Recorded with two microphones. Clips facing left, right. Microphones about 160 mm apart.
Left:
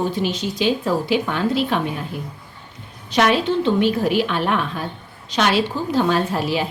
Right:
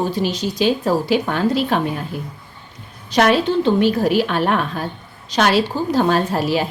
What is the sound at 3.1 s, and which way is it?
A woman's voice, 40° right (ahead or behind).